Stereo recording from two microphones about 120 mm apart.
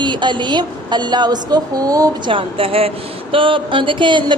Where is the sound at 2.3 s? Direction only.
50° right (ahead or behind).